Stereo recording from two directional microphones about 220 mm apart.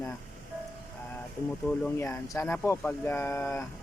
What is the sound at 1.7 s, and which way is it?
Speech, 10° left (ahead or behind).